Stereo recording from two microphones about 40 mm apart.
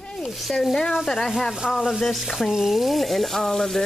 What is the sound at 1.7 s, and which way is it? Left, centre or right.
Frying, centre.